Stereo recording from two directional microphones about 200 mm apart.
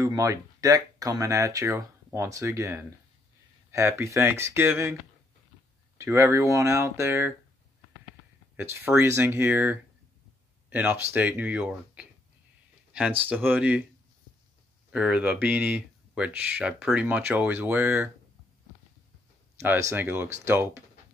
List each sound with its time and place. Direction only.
0.0 s speech: 15° right (ahead or behind)
5.9 s speech: 15° right (ahead or behind)
8.5 s speech: 10° right (ahead or behind)
13.2 s speech: 10° right (ahead or behind)
14.9 s speech: 5° right (ahead or behind)
19.9 s speech: 10° right (ahead or behind)